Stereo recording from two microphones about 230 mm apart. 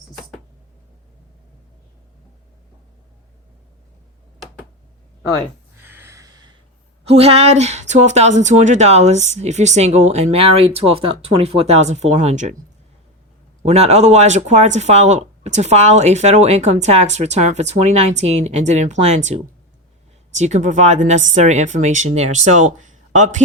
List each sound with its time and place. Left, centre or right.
5.8 s a sound: centre
7.0 s speech: right
13.6 s speech: right
20.4 s speech: right